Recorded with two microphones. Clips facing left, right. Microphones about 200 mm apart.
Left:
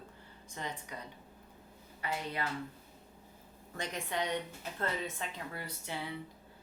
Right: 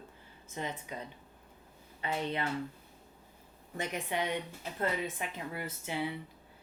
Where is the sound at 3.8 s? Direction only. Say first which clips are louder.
Right 2 dB; 20° right (ahead or behind).